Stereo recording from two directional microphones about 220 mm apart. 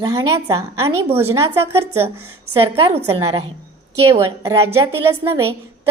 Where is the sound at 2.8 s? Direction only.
25° right (ahead or behind).